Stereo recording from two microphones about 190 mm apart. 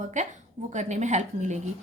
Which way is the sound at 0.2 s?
40° right (ahead or behind).